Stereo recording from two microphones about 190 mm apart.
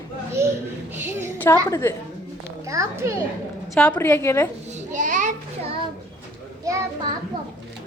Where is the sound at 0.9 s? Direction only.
10° right (ahead or behind).